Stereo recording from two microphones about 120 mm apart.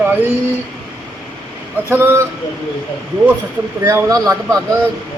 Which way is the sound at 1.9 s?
20° right (ahead or behind).